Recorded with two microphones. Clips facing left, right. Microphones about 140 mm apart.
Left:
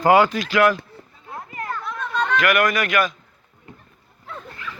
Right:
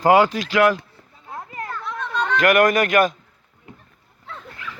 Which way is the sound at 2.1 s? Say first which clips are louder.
Left 1 dB; 5° left (ahead or behind).